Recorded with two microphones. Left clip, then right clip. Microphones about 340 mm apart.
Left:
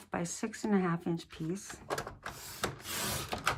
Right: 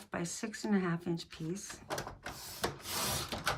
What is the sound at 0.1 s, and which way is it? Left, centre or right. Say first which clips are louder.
Speech: left 2 dB; centre.